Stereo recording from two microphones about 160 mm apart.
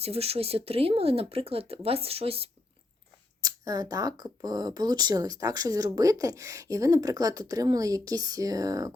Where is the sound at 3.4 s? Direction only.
25° right (ahead or behind).